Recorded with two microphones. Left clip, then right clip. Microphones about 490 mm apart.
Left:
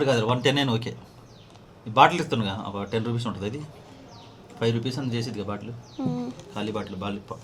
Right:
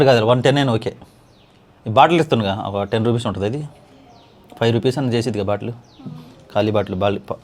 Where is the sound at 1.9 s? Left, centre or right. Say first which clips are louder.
Right 6 dB; right.